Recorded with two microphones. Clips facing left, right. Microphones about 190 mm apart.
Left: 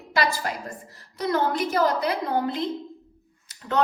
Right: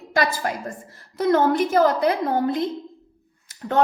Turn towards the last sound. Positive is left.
turn(degrees=-50)  # may be behind; listen again after turning